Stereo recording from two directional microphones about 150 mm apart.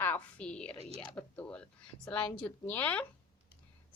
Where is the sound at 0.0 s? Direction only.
10° left (ahead or behind).